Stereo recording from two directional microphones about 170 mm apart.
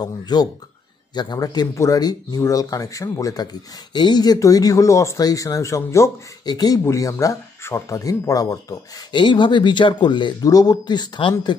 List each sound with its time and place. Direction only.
0.0 s speech: 25° left (ahead or behind)